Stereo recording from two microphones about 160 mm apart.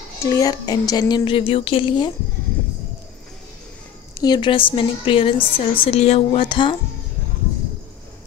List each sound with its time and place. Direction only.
0.2 s speech: 20° left (ahead or behind)
4.1 s a woman's voice: 25° left (ahead or behind)